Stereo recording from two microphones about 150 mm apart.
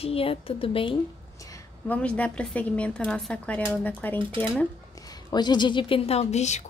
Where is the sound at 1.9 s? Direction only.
10° left (ahead or behind).